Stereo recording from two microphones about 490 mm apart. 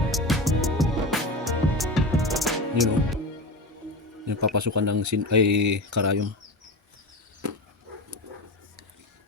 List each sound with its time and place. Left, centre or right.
0.1 s music: centre
4.3 s speech: right